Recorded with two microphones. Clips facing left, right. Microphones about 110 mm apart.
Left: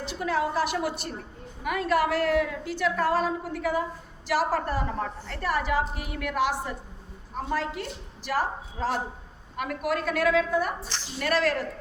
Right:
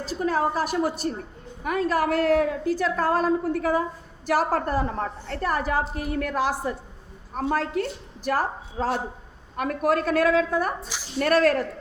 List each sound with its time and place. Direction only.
0.0 s a woman's voice: 40° right (ahead or behind)
7.3 s a woman's voice: 50° right (ahead or behind)